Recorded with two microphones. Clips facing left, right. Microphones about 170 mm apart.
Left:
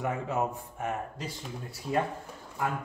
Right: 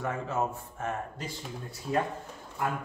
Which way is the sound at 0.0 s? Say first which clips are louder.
Left 1 dB; 15° left (ahead or behind).